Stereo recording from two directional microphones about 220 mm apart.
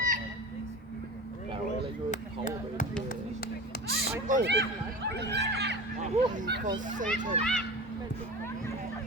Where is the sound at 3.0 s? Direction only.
45° left (ahead or behind).